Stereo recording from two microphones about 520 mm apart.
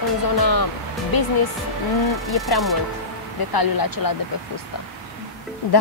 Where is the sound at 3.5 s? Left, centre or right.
Left.